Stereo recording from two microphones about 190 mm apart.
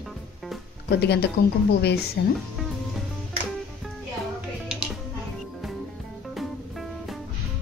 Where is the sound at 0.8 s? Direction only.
60° left (ahead or behind).